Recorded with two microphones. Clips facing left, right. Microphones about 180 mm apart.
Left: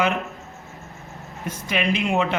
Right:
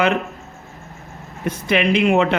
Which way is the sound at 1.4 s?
70° right (ahead or behind).